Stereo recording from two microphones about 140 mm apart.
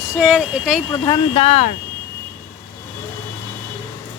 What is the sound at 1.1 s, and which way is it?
Speech, 35° left (ahead or behind).